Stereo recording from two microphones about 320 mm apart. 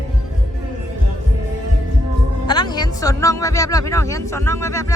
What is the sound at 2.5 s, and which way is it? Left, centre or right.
Speech, centre.